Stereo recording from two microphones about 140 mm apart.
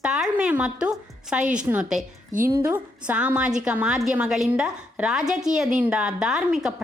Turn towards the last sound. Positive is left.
turn(degrees=-5)  # may be behind; listen again after turning